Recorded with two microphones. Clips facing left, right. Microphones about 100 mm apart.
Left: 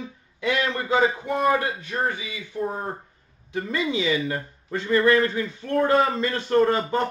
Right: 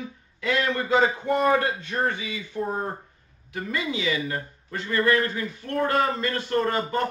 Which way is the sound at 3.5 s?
25° left (ahead or behind).